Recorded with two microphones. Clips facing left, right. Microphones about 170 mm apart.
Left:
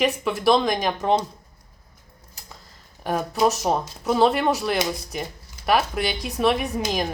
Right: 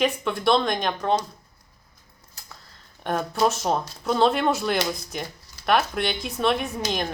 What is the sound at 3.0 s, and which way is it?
Speech, 5° left (ahead or behind).